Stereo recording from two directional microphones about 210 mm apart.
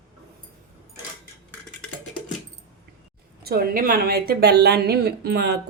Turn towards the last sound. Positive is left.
turn(degrees=-50)  # may be behind; listen again after turning